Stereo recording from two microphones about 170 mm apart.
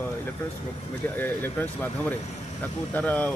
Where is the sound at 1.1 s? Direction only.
10° left (ahead or behind).